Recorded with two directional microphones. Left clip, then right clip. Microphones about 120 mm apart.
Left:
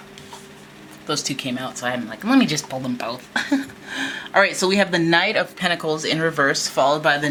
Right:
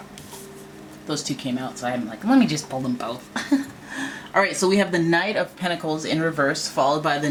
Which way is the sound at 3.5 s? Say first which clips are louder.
Left 1 dB; 30° left (ahead or behind).